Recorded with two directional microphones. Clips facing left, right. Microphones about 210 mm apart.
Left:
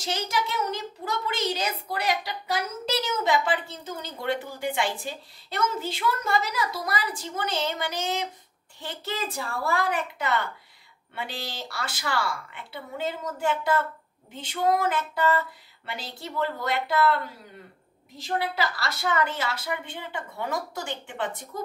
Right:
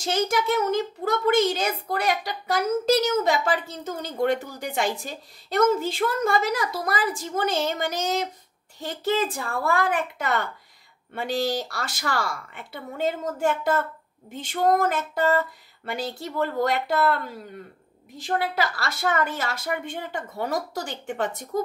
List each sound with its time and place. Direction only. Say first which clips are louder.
0.0 s a child's voice: right 5 dB; 50° right (ahead or behind)